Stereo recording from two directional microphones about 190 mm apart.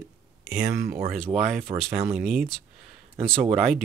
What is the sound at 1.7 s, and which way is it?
Speech, centre (ahead or behind).